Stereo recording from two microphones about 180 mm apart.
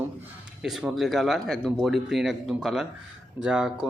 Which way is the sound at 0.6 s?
Centre (ahead or behind).